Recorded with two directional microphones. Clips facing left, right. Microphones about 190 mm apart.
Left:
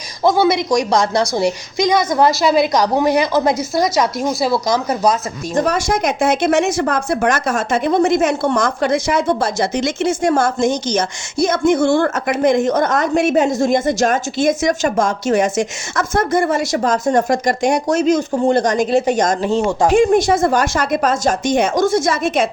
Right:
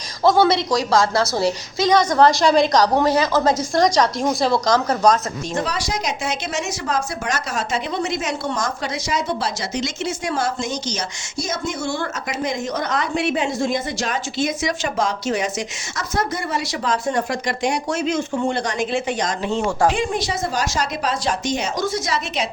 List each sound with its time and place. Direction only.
0.2 s a woman's voice: 10° left (ahead or behind)
5.5 s speech: 50° left (ahead or behind)
19.9 s speech: 50° left (ahead or behind)